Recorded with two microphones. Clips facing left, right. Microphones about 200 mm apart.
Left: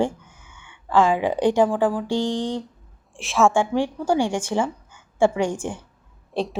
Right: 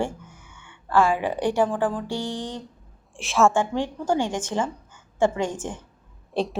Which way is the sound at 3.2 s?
Centre (ahead or behind).